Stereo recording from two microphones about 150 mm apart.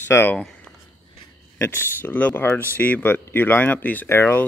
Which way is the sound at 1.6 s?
15° left (ahead or behind).